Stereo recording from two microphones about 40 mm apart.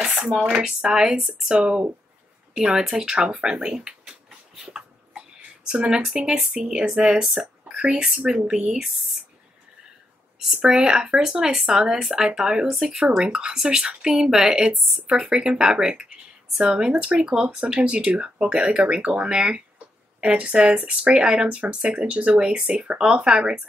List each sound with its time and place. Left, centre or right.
0.4 s a woman's voice: centre
1.6 s speech: right
2.5 s speech: centre
3.6 s a sound: centre
5.7 s a woman's voice: right
10.6 s a woman's voice: centre
19.2 s a woman's voice: right